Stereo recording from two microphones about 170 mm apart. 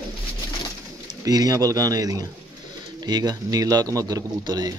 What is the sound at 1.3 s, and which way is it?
A man's voice, 20° right (ahead or behind).